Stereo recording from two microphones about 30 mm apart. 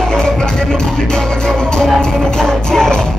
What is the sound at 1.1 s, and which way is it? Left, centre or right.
Music, left.